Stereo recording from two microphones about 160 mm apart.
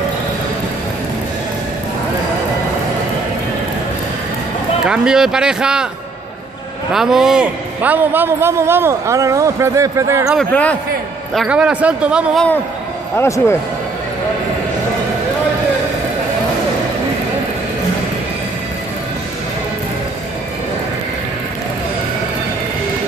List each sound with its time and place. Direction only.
4.8 s speech: 5° right (ahead or behind)
6.9 s a man's voice: 5° right (ahead or behind); by 10.2 s 20° right (ahead or behind)
10.5 s a man's voice: 10° left (ahead or behind)
11.3 s a man's voice: 5° right (ahead or behind)
13.1 s a man's voice: 15° left (ahead or behind)